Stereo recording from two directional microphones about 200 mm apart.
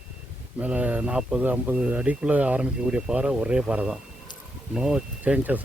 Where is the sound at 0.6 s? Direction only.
5° right (ahead or behind).